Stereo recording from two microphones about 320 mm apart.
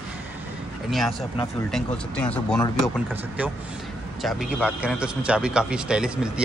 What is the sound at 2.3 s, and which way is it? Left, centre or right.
Speech, centre.